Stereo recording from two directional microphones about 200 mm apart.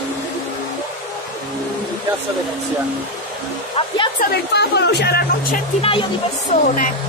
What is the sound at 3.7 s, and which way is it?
Speech, 25° left (ahead or behind).